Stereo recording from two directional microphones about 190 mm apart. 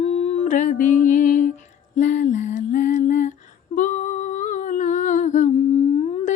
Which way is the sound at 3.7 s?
40° left (ahead or behind).